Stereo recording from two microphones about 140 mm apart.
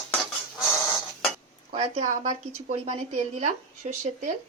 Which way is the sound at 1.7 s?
65° right (ahead or behind).